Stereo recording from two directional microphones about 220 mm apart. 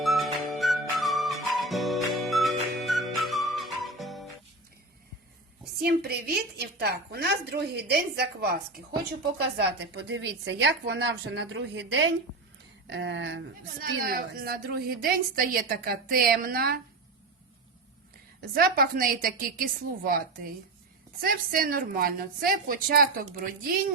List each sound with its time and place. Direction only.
0.0 s music: centre (ahead or behind)
5.8 s a woman's voice: 45° right (ahead or behind)
14.0 s a woman's voice: 40° right (ahead or behind)
18.3 s a woman's voice: 40° right (ahead or behind)